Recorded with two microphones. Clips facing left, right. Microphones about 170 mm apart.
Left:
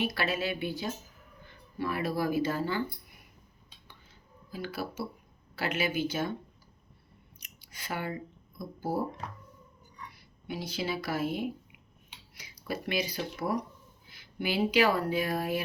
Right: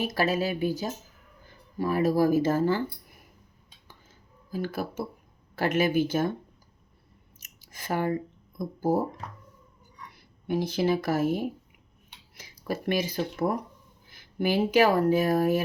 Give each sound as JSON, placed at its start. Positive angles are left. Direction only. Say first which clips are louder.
{"t": 0.0, "sound": "speech", "louder": "right 5 dB", "side_deg": -40}
{"t": 4.5, "sound": "speech", "louder": "right 5 dB", "side_deg": -45}
{"t": 7.3, "sound": "a sound", "louder": "right 3 dB", "side_deg": -45}
{"t": 8.5, "sound": "speech", "louder": "right 7 dB", "side_deg": -45}
{"t": 10.4, "sound": "speech", "louder": "right 9 dB", "side_deg": -50}
{"t": 12.6, "sound": "speech", "louder": "right 5 dB", "side_deg": -45}